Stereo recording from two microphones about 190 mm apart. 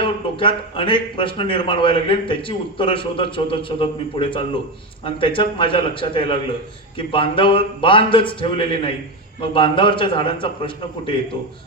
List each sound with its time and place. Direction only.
0.0 s a man's voice: 25° left (ahead or behind)